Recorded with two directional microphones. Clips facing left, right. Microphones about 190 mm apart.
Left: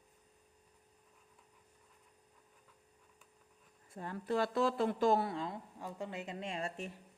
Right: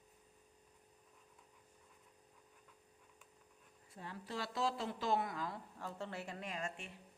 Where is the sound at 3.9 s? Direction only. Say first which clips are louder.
Left 10 dB; 50° left (ahead or behind).